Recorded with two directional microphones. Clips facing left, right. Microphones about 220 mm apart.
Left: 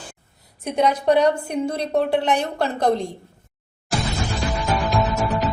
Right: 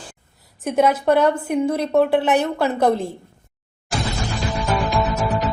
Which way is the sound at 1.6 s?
55° right (ahead or behind).